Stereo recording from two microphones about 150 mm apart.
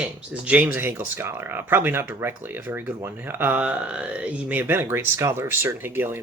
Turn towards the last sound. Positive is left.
turn(degrees=-15)  # may be behind; listen again after turning